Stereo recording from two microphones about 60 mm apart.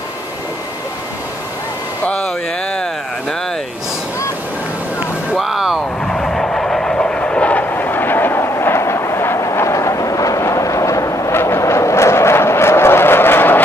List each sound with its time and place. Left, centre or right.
2.0 s speech: centre
5.4 s speech: centre
6.0 s vehicle: centre
7.6 s vehicle: left
9.4 s vehicle: left
11.3 s vehicle: left